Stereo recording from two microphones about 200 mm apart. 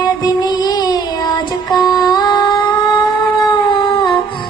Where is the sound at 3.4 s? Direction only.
20° left (ahead or behind).